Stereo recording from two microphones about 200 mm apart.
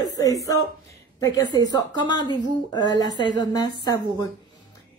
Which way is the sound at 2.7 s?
20° left (ahead or behind).